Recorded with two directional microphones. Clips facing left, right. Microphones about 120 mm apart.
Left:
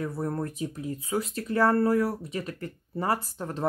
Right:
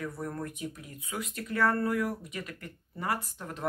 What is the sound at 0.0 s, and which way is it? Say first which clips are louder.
Speech: left 6 dB; 30° left (ahead or behind).